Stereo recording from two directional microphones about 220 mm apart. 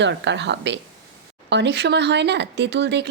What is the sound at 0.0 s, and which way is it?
Speech, 55° right (ahead or behind).